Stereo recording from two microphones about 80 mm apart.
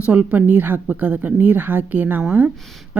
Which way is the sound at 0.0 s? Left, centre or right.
Centre.